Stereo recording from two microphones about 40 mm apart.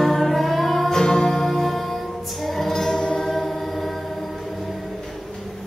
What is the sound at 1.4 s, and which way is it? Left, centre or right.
Music, centre.